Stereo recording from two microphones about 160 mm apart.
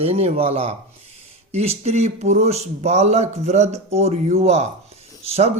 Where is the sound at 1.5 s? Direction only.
40° right (ahead or behind).